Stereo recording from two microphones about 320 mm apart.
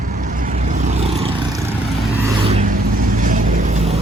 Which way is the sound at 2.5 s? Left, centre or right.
Right.